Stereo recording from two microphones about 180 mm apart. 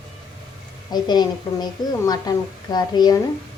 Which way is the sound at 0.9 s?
25° left (ahead or behind).